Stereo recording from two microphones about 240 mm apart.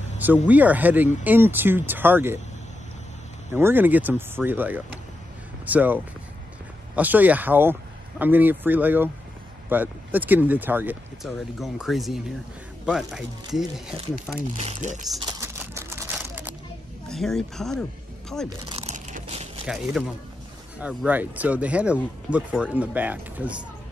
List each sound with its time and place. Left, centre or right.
0.5 s speech: centre
3.5 s speech: centre
14.6 s speech: right
15.4 s typewriter: centre
16.2 s a sound: centre
17.1 s speech: centre
18.7 s crunch: right
19.6 s speech: centre